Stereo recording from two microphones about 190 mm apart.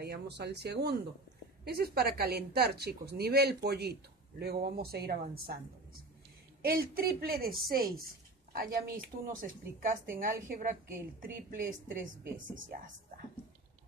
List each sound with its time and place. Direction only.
0.0 s speech: 60° right (ahead or behind)
6.6 s a woman's voice: 50° right (ahead or behind)